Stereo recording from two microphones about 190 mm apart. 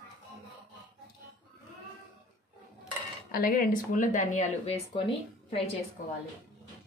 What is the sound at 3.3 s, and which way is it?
Speech, 45° left (ahead or behind).